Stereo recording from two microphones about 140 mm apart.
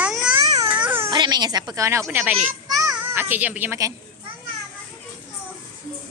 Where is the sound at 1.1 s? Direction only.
30° right (ahead or behind); by 3.8 s 15° right (ahead or behind).